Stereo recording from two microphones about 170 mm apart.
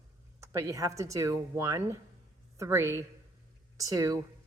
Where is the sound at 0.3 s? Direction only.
15° right (ahead or behind).